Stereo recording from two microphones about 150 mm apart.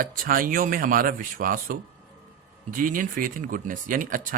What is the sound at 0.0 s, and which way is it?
Speech, 70° right (ahead or behind).